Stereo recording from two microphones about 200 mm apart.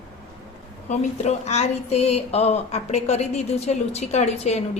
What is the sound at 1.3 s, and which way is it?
A woman's voice, 35° left (ahead or behind).